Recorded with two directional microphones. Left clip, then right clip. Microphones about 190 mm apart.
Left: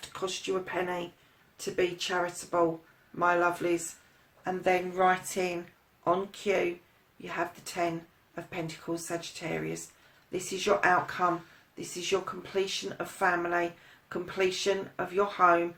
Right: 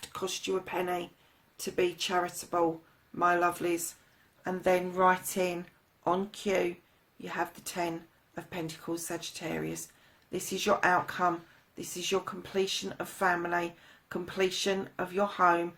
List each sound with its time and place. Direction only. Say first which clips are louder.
0.0 s speech: left 1 dB; 50° right (ahead or behind)